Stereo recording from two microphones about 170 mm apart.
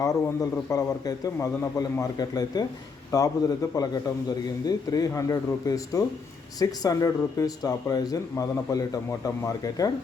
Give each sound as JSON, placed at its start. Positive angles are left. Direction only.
{"t": 0.0, "sound": "speech", "side_deg": 20}